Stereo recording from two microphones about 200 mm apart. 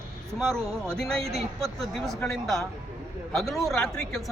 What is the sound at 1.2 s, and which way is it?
Speech, 30° right (ahead or behind).